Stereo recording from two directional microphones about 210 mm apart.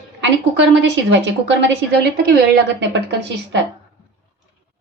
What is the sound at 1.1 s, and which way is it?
A woman's voice, 60° right (ahead or behind).